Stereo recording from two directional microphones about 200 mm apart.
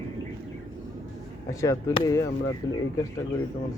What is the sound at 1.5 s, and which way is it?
Speech, 15° left (ahead or behind).